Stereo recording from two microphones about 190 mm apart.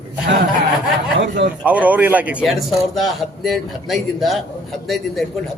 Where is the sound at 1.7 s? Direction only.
10° right (ahead or behind).